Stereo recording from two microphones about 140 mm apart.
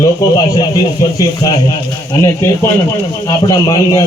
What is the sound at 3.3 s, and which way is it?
Speech, 25° left (ahead or behind).